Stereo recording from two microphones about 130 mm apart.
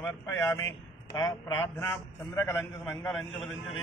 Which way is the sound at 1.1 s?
30° left (ahead or behind).